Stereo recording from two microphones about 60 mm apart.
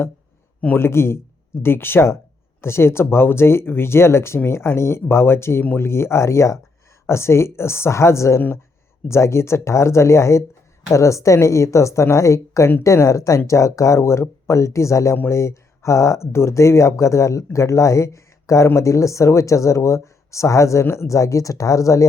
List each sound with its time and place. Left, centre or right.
0.8 s speech: left
20.8 s speech: left